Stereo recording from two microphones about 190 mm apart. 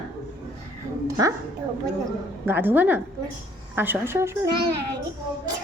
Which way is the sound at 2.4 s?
10° right (ahead or behind).